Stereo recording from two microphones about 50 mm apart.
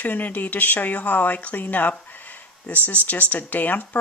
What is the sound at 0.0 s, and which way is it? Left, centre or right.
Speech, left.